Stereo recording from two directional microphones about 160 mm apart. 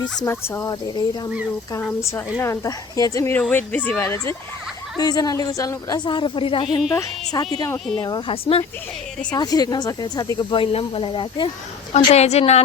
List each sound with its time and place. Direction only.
0.3 s speech: 15° left (ahead or behind)
2.4 s speech: 20° left (ahead or behind); by 8.6 s 35° left (ahead or behind)
9.3 s speech: 25° left (ahead or behind)
11.9 s a woman's voice: 40° left (ahead or behind)